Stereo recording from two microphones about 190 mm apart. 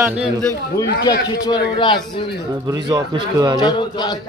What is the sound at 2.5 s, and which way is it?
A man's voice, 20° right (ahead or behind).